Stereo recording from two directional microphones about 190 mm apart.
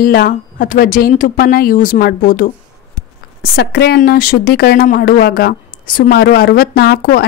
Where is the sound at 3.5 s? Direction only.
55° left (ahead or behind).